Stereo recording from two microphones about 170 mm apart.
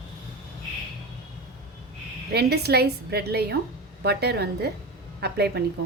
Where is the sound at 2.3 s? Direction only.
70° right (ahead or behind).